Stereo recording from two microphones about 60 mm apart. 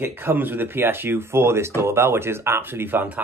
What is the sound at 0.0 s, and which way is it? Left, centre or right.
Speech, right.